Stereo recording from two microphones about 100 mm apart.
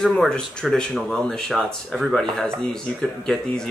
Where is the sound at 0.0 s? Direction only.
5° left (ahead or behind).